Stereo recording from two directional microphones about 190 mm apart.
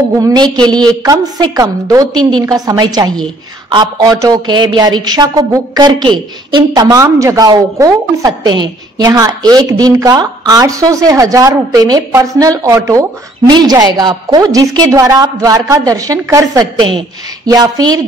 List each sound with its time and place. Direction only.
0.2 s a woman's voice: 20° right (ahead or behind)